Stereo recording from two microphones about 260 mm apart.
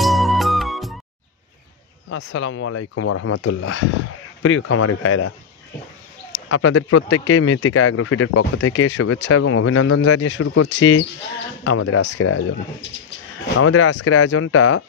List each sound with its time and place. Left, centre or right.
0.0 s music: centre
2.0 s speech: left
6.5 s speech: left
13.6 s speech: left